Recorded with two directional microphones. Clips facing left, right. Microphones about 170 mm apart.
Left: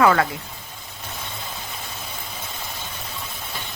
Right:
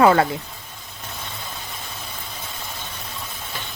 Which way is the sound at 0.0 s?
30° right (ahead or behind).